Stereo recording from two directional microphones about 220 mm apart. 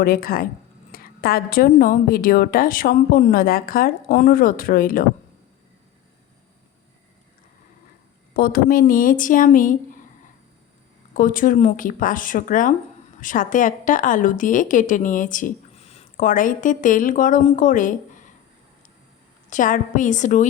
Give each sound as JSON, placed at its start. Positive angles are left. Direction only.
{"t": 0.0, "sound": "a woman's voice", "side_deg": 40}
{"t": 8.3, "sound": "a woman's voice", "side_deg": 40}
{"t": 11.1, "sound": "a woman's voice", "side_deg": 40}
{"t": 19.5, "sound": "a woman's voice", "side_deg": 35}